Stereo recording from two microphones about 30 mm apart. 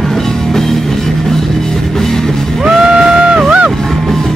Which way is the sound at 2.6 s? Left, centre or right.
Right.